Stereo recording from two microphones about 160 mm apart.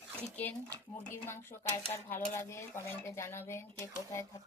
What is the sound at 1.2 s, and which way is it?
Dishes, 15° left (ahead or behind).